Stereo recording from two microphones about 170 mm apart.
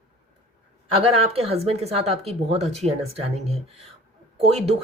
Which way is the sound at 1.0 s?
35° right (ahead or behind).